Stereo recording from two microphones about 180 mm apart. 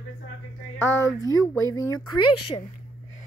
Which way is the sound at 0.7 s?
90° left.